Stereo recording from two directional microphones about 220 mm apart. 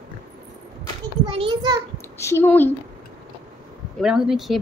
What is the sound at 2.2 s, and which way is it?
Speech, 10° left (ahead or behind).